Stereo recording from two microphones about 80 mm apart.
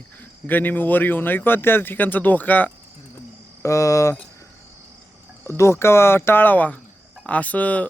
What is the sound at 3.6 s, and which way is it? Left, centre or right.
Speech, left.